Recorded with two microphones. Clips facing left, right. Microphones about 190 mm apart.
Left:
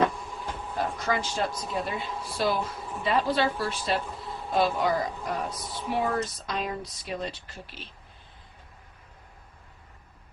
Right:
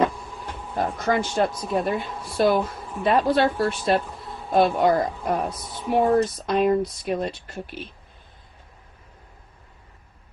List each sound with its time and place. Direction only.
0.8 s a woman's voice: 50° right (ahead or behind)